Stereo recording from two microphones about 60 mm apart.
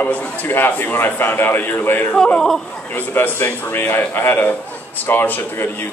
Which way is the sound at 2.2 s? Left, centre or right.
Centre.